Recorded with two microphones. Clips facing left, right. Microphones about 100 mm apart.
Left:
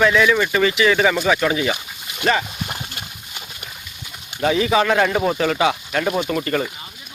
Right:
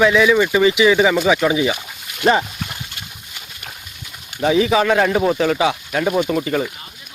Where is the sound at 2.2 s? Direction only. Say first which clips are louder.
Right 4 dB; 25° right (ahead or behind).